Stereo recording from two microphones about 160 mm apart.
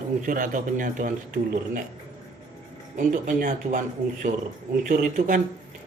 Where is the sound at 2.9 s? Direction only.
55° right (ahead or behind).